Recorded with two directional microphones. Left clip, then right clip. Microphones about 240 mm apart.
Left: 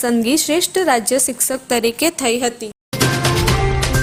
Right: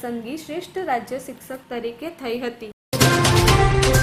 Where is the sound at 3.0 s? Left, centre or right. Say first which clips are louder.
Even; centre.